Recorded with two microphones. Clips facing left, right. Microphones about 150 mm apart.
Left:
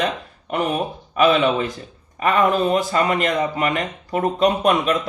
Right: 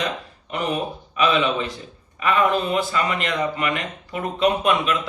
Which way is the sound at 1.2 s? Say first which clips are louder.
Left 4 dB; 45° left (ahead or behind).